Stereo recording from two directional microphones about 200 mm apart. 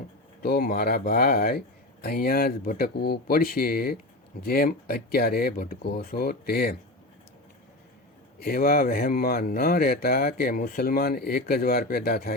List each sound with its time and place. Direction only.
0.4 s speech: 50° left (ahead or behind)
8.4 s speech: 50° left (ahead or behind)